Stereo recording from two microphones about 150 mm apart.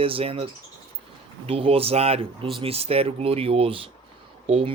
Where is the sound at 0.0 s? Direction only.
40° right (ahead or behind).